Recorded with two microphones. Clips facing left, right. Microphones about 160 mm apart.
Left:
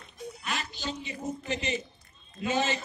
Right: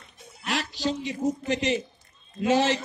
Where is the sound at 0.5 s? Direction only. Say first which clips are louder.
Right 8 dB; 90° right.